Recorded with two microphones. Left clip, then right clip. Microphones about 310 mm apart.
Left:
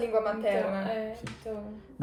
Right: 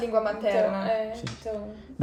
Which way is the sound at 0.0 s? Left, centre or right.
Centre.